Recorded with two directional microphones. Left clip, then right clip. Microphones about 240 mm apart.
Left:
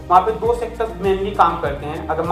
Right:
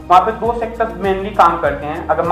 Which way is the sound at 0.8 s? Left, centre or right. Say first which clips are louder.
Right 2 dB; centre.